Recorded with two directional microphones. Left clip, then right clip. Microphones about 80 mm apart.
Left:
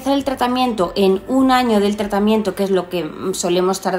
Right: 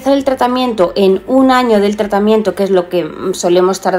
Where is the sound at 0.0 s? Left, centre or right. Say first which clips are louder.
Right 6 dB; left.